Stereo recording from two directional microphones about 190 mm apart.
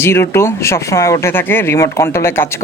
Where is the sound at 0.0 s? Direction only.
15° left (ahead or behind).